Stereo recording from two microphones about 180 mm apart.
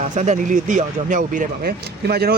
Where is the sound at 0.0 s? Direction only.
45° right (ahead or behind).